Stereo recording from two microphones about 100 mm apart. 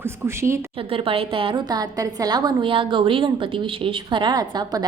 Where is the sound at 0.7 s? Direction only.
65° right (ahead or behind).